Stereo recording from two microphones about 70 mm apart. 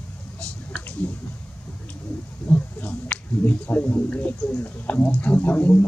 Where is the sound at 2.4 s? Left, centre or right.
Left.